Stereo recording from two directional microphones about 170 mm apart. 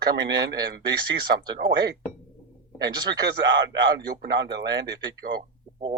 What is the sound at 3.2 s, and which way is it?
A man's voice, 90° right.